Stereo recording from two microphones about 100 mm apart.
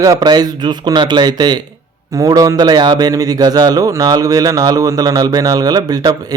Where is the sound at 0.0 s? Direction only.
40° right (ahead or behind).